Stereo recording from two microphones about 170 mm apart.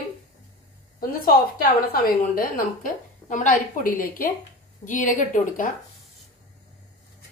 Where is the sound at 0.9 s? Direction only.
60° left (ahead or behind).